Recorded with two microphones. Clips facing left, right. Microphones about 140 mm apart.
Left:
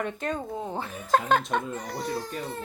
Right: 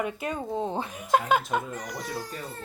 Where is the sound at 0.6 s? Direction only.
20° right (ahead or behind).